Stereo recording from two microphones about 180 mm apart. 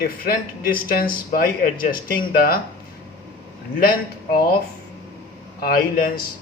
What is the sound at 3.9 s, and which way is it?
Speech, 55° left (ahead or behind).